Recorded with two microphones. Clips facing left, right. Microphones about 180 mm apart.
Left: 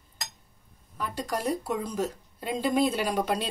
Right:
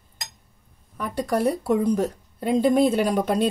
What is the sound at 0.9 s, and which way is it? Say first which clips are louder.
Speech: right 7 dB; 60° right (ahead or behind).